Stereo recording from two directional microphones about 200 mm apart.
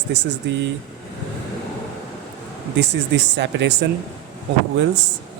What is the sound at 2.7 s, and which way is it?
Speech, 60° right (ahead or behind).